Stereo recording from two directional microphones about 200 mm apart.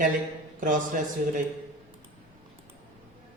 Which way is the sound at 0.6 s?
40° right (ahead or behind).